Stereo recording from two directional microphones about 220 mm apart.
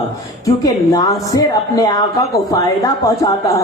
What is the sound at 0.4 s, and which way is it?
Speech, 15° left (ahead or behind).